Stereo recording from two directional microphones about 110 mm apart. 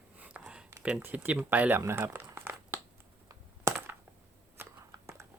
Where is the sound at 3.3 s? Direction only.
25° right (ahead or behind).